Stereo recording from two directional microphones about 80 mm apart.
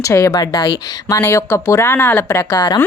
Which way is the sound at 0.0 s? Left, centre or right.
Left.